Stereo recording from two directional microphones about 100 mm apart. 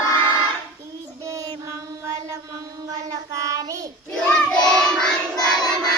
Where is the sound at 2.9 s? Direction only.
35° right (ahead or behind).